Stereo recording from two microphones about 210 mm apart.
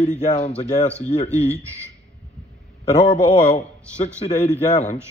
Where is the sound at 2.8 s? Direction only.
30° left (ahead or behind).